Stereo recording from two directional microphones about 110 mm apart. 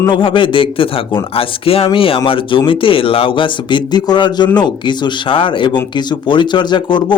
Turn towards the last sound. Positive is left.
turn(degrees=45)  # may be behind; listen again after turning